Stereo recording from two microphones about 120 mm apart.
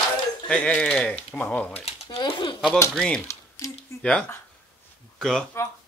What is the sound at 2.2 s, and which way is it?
Speech, 40° left (ahead or behind).